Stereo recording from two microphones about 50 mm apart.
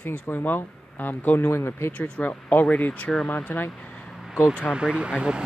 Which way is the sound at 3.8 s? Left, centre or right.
Left.